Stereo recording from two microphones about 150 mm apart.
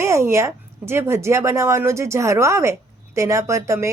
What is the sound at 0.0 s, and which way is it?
A woman's voice, 20° right (ahead or behind).